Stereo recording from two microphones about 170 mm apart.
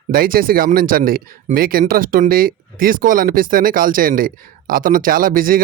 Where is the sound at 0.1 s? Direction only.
60° right (ahead or behind).